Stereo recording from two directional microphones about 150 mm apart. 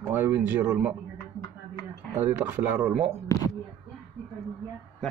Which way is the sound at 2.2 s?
10° right (ahead or behind).